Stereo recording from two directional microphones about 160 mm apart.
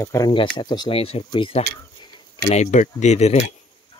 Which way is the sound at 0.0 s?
20° left (ahead or behind).